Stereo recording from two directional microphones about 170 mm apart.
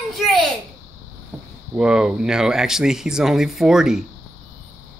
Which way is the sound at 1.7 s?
5° right (ahead or behind).